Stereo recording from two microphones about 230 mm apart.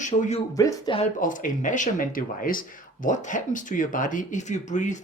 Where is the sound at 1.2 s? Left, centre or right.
Left.